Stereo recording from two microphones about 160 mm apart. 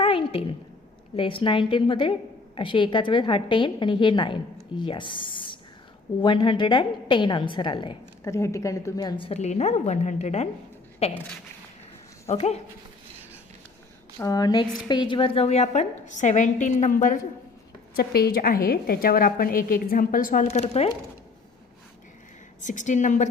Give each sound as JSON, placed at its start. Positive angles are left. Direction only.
{"t": 0.0, "sound": "a sound", "side_deg": 35}
{"t": 1.1, "sound": "a woman's voice", "side_deg": 35}
{"t": 8.2, "sound": "a woman's voice", "side_deg": 20}
{"t": 12.3, "sound": "a woman's voice", "side_deg": 40}
{"t": 14.2, "sound": "a sound", "side_deg": 25}
{"t": 14.8, "sound": "a woman's voice", "side_deg": 30}
{"t": 17.9, "sound": "a woman's voice", "side_deg": 75}
{"t": 22.6, "sound": "a woman's voice", "side_deg": 50}